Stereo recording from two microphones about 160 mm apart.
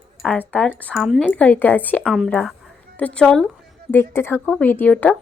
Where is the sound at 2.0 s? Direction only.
Centre (ahead or behind).